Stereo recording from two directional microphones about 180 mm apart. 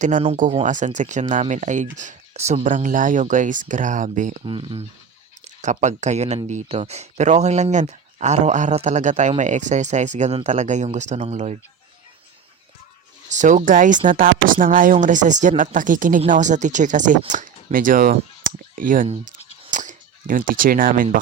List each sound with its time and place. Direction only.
0.5 s speech: 45° right (ahead or behind)
4.4 s speech: 30° right (ahead or behind)
5.6 s speech: 40° right (ahead or behind)
13.3 s speech: 45° right (ahead or behind)
19.0 s a sound: 35° right (ahead or behind)